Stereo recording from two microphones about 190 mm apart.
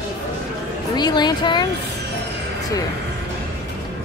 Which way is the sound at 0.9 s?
20° left (ahead or behind).